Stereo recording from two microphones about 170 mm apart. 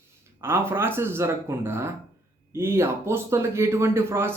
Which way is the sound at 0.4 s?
15° right (ahead or behind).